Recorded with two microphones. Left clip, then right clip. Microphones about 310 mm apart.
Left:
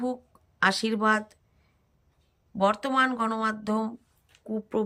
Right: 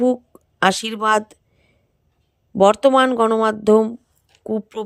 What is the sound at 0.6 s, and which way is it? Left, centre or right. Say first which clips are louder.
Speech: right 6 dB; centre.